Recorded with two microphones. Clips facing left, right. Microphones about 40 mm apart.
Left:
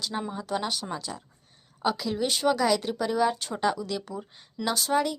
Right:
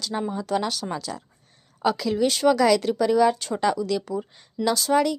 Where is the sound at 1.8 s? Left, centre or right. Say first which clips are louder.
Right 5 dB; centre.